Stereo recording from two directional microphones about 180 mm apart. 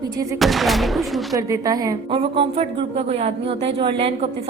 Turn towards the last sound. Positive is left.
turn(degrees=-30)  # may be behind; listen again after turning